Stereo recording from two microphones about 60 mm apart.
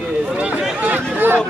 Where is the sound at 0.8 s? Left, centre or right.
Right.